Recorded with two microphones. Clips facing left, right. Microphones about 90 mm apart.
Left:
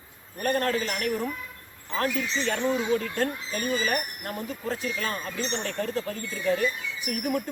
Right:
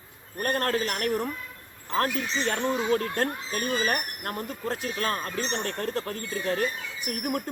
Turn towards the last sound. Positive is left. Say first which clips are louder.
# left 2 dB
turn(degrees=-45)  # may be behind; listen again after turning